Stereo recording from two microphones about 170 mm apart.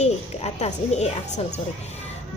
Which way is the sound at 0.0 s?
40° left (ahead or behind).